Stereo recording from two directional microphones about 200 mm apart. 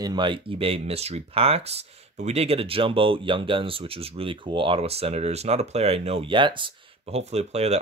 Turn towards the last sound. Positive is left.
turn(degrees=-30)  # may be behind; listen again after turning